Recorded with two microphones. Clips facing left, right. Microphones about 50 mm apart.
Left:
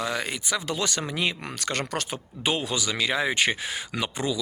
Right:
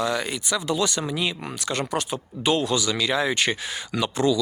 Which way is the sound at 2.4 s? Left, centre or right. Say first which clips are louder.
Right 5 dB; left.